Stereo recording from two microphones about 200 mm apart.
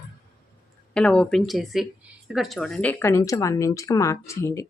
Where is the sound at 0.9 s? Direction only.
5° left (ahead or behind).